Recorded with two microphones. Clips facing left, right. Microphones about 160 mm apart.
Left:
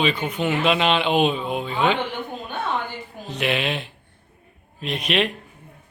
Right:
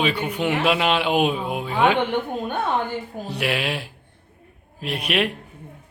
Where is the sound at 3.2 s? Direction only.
10° right (ahead or behind).